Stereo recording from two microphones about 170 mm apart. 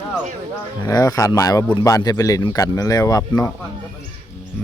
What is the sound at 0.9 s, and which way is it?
Speech, 20° left (ahead or behind).